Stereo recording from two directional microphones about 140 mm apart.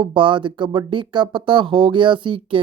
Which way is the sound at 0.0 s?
35° right (ahead or behind).